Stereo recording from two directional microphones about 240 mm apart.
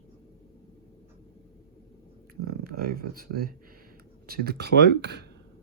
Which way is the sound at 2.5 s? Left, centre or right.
Right.